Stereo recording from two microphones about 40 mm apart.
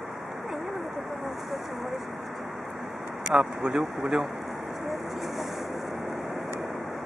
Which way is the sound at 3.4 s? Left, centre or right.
Right.